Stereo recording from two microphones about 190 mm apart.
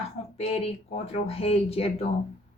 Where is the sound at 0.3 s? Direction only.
30° left (ahead or behind).